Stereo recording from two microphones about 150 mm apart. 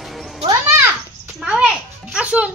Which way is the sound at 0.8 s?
10° right (ahead or behind).